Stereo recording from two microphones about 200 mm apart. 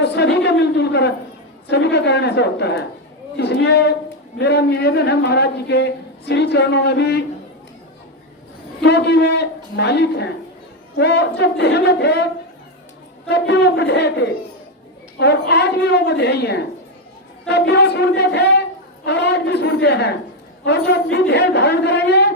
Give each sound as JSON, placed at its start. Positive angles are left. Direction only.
{"t": 0.0, "sound": "a woman's voice", "side_deg": 60}
{"t": 8.8, "sound": "a man's voice", "side_deg": 60}